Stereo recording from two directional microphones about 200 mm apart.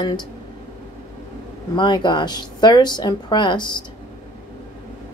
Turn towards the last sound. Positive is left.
turn(degrees=20)  # may be behind; listen again after turning